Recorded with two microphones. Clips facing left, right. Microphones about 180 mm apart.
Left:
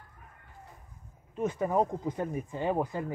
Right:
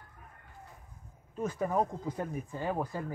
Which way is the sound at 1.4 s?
20° left (ahead or behind).